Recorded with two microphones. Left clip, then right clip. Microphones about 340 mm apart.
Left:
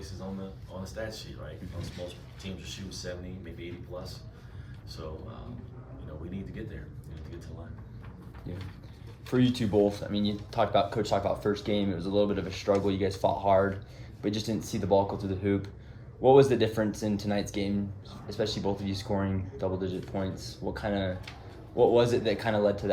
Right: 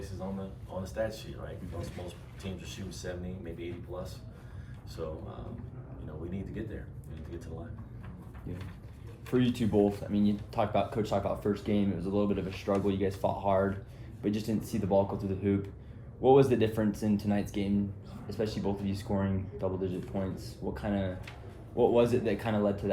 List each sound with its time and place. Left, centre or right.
0.9 s speech: centre
9.3 s speech: left